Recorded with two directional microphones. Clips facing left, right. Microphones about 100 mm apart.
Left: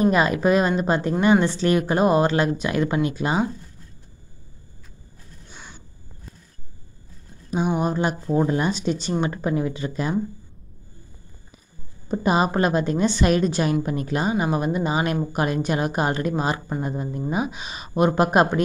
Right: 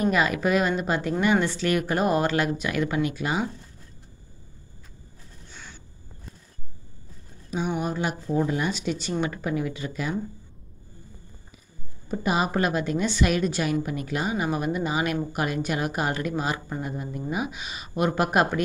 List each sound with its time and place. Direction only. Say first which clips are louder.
0.0 s a woman's voice: left 4 dB; 30° left (ahead or behind)
5.5 s a sound: left 2 dB; 15° left (ahead or behind)
7.5 s a woman's voice: left 5 dB; 40° left (ahead or behind)
12.1 s a woman's voice: left 4 dB; 35° left (ahead or behind)